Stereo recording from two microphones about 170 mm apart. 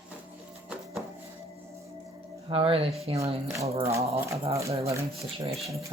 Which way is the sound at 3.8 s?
15° right (ahead or behind).